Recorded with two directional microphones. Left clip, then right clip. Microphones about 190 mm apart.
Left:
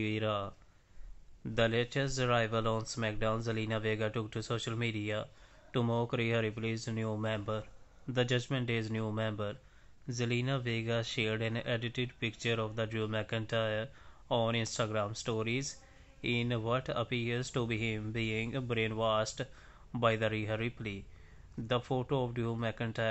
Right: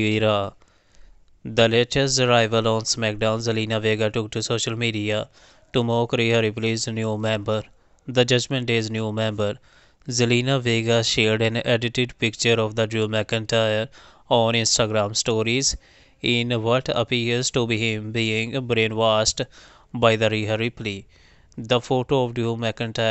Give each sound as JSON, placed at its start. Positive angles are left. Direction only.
{"t": 0.0, "sound": "speech", "side_deg": -50}